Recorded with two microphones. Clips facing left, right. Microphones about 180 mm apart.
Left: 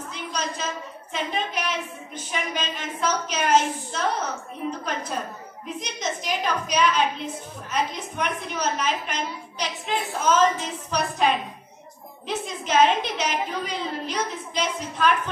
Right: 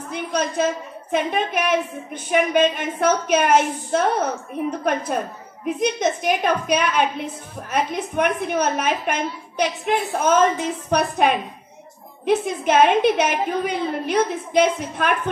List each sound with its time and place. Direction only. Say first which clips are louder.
0.1 s a sound: right 9 dB; 55° right (ahead or behind)
1.1 s a woman's voice: right 7 dB; 55° right (ahead or behind)
12.3 s a woman's voice: right 9 dB; 55° right (ahead or behind)